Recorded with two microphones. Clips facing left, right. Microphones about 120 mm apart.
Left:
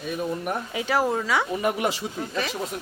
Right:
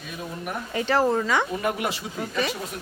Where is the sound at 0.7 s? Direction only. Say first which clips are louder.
Right 3 dB; 5° left (ahead or behind).